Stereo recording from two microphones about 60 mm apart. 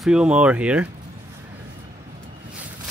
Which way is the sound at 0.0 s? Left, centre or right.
Centre.